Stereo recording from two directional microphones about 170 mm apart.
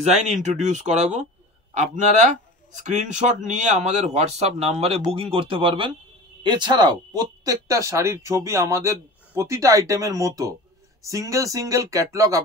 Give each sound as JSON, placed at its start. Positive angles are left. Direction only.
{"t": 0.0, "sound": "a man's voice", "side_deg": -40}